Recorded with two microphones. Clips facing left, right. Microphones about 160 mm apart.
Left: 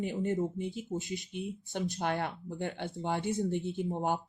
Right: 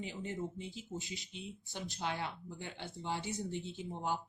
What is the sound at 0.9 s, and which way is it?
Speech, 55° left (ahead or behind).